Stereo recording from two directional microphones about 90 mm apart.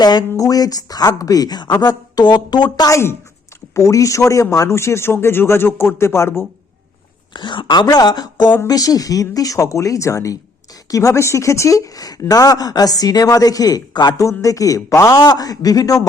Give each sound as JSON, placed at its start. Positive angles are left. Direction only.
{"t": 0.0, "sound": "a man's voice", "side_deg": 50}
{"t": 7.3, "sound": "speech", "side_deg": 60}
{"t": 14.3, "sound": "speech", "side_deg": 40}